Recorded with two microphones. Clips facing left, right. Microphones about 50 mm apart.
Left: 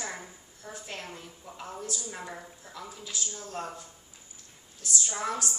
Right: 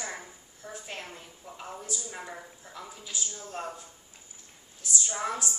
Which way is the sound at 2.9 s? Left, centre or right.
Centre.